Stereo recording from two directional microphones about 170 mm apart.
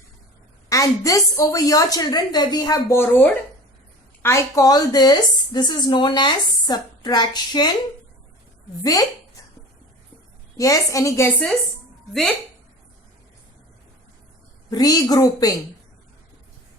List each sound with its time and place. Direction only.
0.7 s a woman's voice: 20° left (ahead or behind)
8.8 s a woman's voice: 20° left (ahead or behind)
10.6 s a woman's voice: 20° left (ahead or behind)
14.7 s a woman's voice: 20° left (ahead or behind)